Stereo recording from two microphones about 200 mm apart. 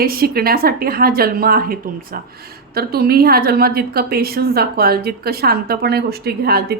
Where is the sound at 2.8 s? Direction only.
50° right (ahead or behind).